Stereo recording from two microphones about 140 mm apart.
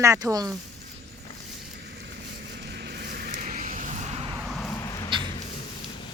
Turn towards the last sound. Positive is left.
turn(degrees=25)  # may be behind; listen again after turning